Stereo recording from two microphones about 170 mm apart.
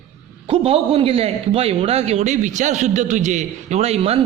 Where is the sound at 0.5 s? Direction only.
35° right (ahead or behind).